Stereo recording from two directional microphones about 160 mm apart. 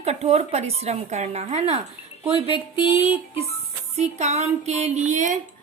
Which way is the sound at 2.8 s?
10° right (ahead or behind).